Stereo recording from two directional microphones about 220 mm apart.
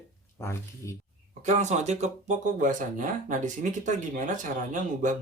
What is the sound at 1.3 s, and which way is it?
Speech, 30° right (ahead or behind).